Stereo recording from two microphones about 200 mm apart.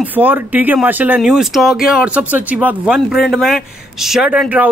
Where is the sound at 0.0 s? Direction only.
10° right (ahead or behind).